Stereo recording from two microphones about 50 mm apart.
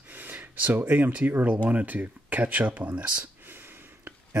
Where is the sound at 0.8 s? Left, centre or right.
Right.